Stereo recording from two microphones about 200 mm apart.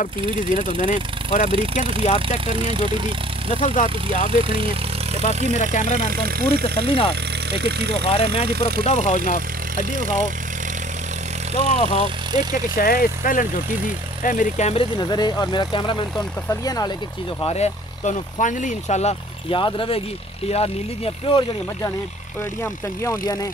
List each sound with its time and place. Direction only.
0.8 s speech: 40° left (ahead or behind)
2.1 s speech: 25° right (ahead or behind)
3.6 s speech: 40° left (ahead or behind)
4.3 s speech: 25° right (ahead or behind)
5.5 s speech: 40° left (ahead or behind)
6.0 s speech: 45° right (ahead or behind)
8.1 s speech: 30° left (ahead or behind)
9.9 s speech: 40° right (ahead or behind)
11.5 s speech: 35° left (ahead or behind)
12.4 s speech: 45° left (ahead or behind)
15.0 s speech: 20° left (ahead or behind)
17.4 s speech: 30° left (ahead or behind)